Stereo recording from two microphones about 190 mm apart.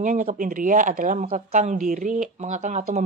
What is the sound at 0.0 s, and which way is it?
Speech, 40° right (ahead or behind).